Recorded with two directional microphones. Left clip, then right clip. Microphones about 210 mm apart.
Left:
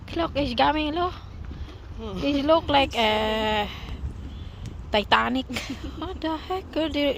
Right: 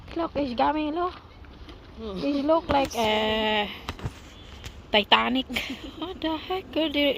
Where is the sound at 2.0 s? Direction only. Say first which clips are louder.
Left 1 dB; 60° left (ahead or behind).